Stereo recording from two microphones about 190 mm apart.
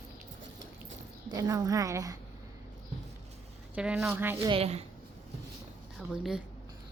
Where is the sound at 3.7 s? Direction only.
5° right (ahead or behind).